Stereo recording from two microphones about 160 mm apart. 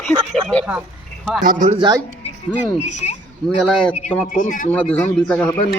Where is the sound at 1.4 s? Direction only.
50° right (ahead or behind).